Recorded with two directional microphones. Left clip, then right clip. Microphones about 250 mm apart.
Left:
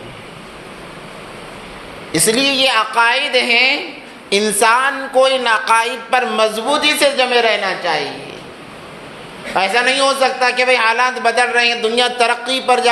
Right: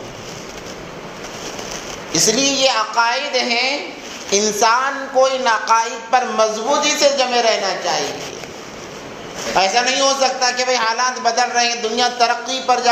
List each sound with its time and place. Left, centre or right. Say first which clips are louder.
2.1 s speech: left 2 dB; left
9.6 s speech: left 2 dB; left